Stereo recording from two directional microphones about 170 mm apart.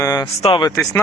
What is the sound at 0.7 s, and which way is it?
Speech, 20° left (ahead or behind).